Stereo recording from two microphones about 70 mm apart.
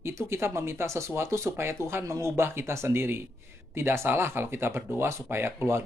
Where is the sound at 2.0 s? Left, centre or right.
Right.